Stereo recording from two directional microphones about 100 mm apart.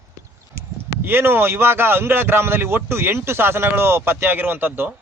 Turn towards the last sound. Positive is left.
turn(degrees=-20)  # may be behind; listen again after turning